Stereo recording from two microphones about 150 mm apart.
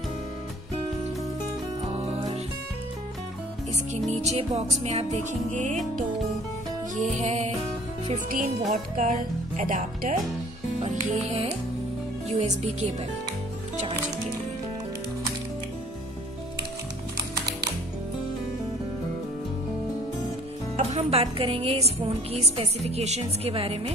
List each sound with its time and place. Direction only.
2.0 s music: 40° right (ahead or behind)
4.2 s music: 45° right (ahead or behind)
7.0 s music: 50° right (ahead or behind)
8.9 s speech: 60° right (ahead or behind)
10.8 s music: 45° right (ahead or behind)
20.7 s speech: 45° right (ahead or behind)